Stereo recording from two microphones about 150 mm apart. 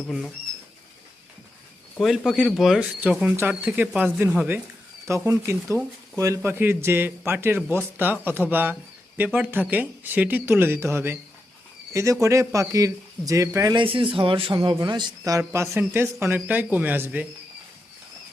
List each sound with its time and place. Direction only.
2.0 s speech: 5° right (ahead or behind)
12.2 s speech: 20° right (ahead or behind)
13.7 s speech: 35° right (ahead or behind); by 17.2 s 10° right (ahead or behind)